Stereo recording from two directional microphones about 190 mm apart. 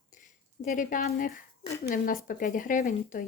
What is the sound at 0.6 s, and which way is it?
A child's voice, 45° left (ahead or behind).